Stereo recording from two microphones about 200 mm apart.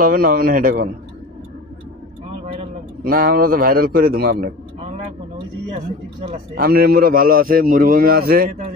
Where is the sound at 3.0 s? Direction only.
45° right (ahead or behind).